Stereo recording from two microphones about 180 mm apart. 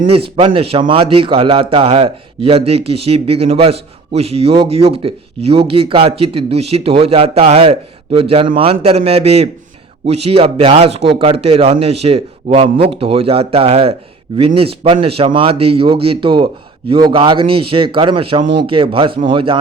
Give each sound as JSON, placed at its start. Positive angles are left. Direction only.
{"t": 0.3, "sound": "a man's voice", "side_deg": -30}